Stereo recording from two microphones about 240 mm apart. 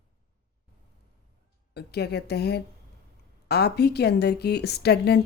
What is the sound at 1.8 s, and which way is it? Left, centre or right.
A woman's voice, left.